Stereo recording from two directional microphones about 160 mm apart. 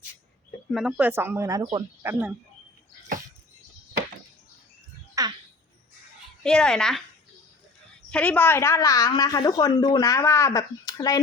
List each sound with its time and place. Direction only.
0.7 s speech: 5° right (ahead or behind)
5.2 s a sound: 20° right (ahead or behind)
6.4 s a woman's voice: 5° left (ahead or behind)
8.1 s a woman's voice: 10° left (ahead or behind); by 11.2 s 25° left (ahead or behind)